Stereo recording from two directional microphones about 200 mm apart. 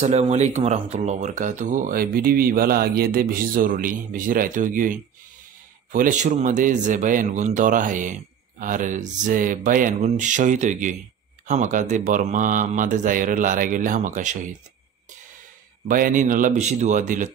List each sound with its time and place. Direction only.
0.0 s speech: 35° right (ahead or behind)
15.9 s speech: 40° right (ahead or behind)